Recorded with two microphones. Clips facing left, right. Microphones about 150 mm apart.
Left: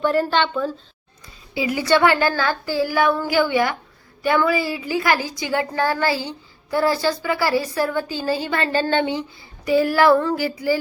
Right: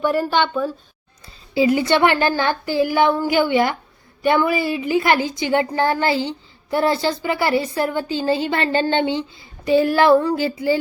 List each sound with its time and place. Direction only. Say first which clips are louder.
0.0 s a woman's voice: even; 15° right (ahead or behind)
1.5 s a woman's voice: right 3 dB; 25° right (ahead or behind)